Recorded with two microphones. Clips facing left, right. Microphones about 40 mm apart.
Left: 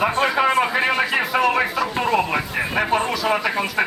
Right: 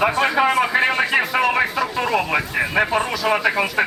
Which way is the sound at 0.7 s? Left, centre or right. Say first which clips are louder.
Right 2 dB; centre.